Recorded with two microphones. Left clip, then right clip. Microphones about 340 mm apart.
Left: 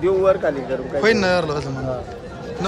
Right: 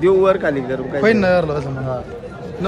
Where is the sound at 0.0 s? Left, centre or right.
Right.